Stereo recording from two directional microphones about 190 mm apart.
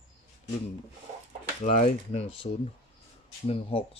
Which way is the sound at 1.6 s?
40° left (ahead or behind).